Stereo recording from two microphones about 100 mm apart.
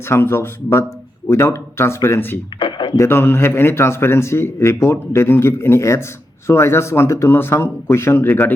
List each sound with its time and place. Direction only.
0.1 s a man's voice: 25° left (ahead or behind)
2.6 s a sound: 55° left (ahead or behind)
2.9 s a man's voice: 25° left (ahead or behind)